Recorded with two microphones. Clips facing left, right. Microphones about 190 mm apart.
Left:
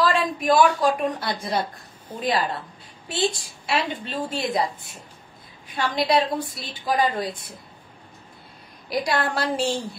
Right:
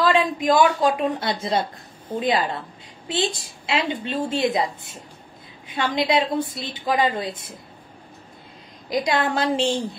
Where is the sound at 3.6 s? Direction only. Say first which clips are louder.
Right 2 dB; 25° right (ahead or behind).